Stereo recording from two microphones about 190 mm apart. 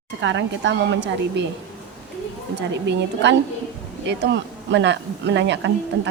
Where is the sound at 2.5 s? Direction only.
65° right (ahead or behind).